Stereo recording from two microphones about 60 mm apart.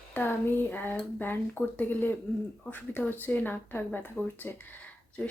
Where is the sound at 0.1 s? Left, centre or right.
Left.